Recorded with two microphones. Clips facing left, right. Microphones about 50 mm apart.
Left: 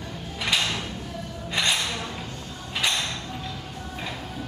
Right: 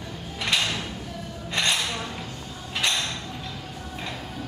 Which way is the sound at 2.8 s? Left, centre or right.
Centre.